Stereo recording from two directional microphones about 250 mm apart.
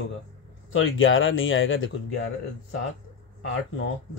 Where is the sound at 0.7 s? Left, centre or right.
Left.